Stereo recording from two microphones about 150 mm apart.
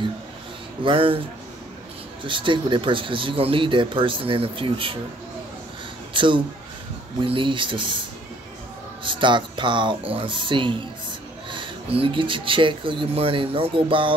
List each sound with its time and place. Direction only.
0.8 s speech: 35° right (ahead or behind)
2.2 s speech: 35° right (ahead or behind)
6.1 s speech: 35° right (ahead or behind)
9.0 s speech: 30° right (ahead or behind)